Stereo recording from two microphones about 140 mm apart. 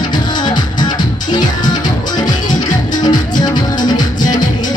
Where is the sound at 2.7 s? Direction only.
30° left (ahead or behind).